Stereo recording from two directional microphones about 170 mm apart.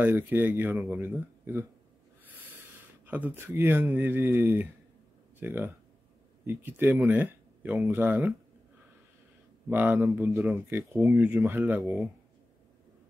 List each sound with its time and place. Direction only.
0.0 s speech: 10° right (ahead or behind)
1.0 s speech: 10° right (ahead or behind)
3.1 s speech: 10° right (ahead or behind)
9.7 s speech: 10° right (ahead or behind)
11.8 s speech: centre (ahead or behind)